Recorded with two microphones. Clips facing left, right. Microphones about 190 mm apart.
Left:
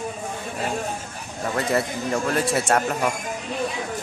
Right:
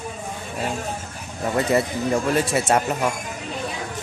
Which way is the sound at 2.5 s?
15° right (ahead or behind).